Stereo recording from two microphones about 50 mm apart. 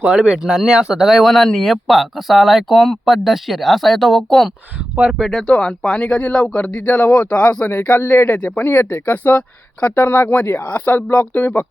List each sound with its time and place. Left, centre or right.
0.2 s speech: centre
1.2 s speech: centre
5.4 s speech: centre
6.8 s speech: left
7.7 s speech: left
11.1 s speech: left